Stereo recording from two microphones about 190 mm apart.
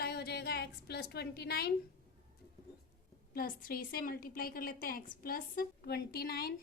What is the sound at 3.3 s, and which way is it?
A woman's voice, 50° left (ahead or behind).